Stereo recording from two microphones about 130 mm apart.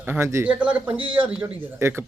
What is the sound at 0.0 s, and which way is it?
Speech, 15° right (ahead or behind).